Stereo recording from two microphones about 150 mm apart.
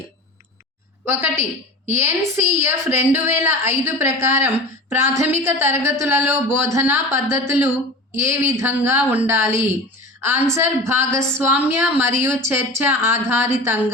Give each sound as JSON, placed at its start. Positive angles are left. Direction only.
{"t": 1.0, "sound": "a woman's voice", "side_deg": -15}